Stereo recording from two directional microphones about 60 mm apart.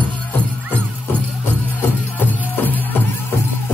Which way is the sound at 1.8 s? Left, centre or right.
Left.